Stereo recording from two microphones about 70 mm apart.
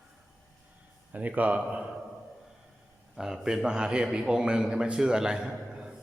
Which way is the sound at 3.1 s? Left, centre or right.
Centre.